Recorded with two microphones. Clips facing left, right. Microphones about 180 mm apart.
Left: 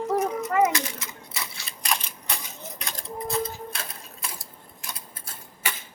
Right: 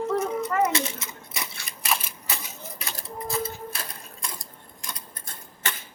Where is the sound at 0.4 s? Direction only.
25° right (ahead or behind).